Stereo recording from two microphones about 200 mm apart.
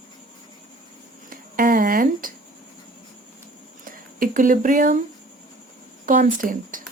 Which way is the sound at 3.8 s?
45° right (ahead or behind).